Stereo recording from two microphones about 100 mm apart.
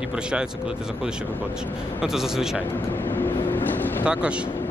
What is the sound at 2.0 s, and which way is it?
Speech, 5° right (ahead or behind).